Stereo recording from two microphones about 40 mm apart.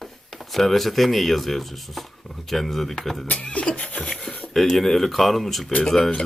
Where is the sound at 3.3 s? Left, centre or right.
Left.